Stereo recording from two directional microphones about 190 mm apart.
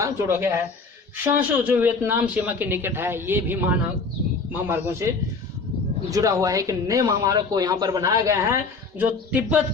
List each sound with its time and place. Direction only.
0.0 s speech: 15° right (ahead or behind)
6.1 s speech: 15° right (ahead or behind)